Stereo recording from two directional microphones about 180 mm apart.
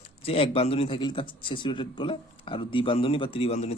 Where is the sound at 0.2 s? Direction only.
30° left (ahead or behind).